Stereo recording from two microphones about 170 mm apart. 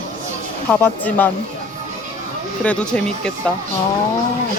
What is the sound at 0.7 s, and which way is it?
Speech, 10° left (ahead or behind).